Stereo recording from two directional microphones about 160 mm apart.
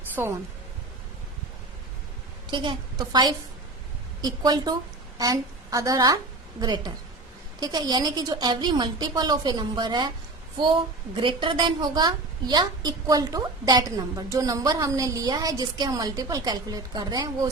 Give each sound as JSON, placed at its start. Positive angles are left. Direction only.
{"t": 0.2, "sound": "speech", "side_deg": -15}
{"t": 2.5, "sound": "a woman's voice", "side_deg": -30}